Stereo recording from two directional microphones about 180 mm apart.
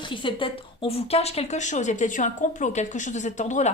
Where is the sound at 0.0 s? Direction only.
30° left (ahead or behind).